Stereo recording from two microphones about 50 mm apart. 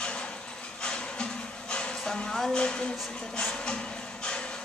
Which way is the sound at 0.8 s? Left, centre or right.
Centre.